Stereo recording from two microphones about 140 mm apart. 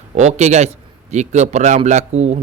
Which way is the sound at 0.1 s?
55° right (ahead or behind).